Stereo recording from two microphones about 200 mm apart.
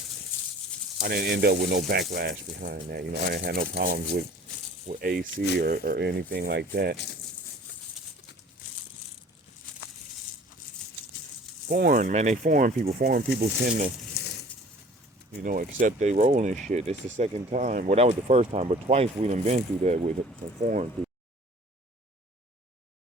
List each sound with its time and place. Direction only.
0.9 s speech: 50° right (ahead or behind)
11.7 s speech: 45° right (ahead or behind)
14.2 s a sound: 50° left (ahead or behind)
15.4 s speech: 40° right (ahead or behind)